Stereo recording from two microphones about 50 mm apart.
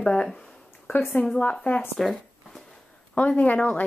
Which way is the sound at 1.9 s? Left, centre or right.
Centre.